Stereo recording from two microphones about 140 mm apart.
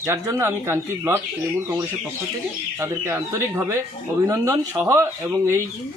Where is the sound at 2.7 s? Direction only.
20° right (ahead or behind).